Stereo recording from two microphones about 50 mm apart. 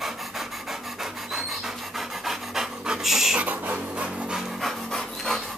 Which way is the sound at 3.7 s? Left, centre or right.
Right.